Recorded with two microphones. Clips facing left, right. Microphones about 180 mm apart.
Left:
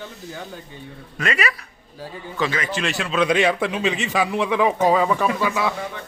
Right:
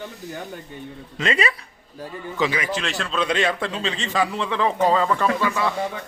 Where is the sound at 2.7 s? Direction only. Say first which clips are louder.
Left 3 dB; 5° left (ahead or behind).